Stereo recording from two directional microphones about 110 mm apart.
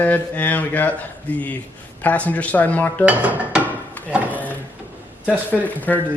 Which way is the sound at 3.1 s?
15° right (ahead or behind).